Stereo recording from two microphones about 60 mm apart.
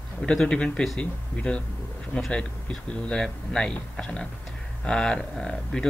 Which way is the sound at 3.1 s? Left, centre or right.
Centre.